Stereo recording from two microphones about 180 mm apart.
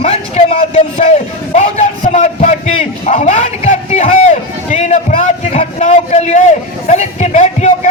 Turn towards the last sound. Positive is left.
turn(degrees=40)  # may be behind; listen again after turning